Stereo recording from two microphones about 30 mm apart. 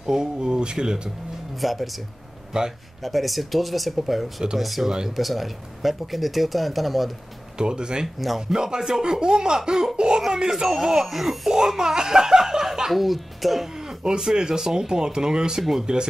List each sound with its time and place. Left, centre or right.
0.0 s speech: right
1.6 s speech: centre
2.5 s speech: right
3.0 s speech: centre
7.5 s speech: right
11.1 s speech: centre
11.5 s speech: centre
12.9 s speech: centre
13.7 s a sound: centre
14.3 s speech: right